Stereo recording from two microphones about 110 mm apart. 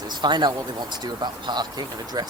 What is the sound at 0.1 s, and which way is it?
A man's voice, 40° right (ahead or behind).